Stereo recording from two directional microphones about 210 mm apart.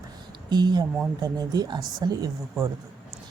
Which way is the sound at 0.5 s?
20° right (ahead or behind).